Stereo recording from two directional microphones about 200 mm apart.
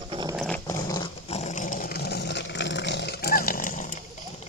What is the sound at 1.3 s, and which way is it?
Dog, 35° left (ahead or behind).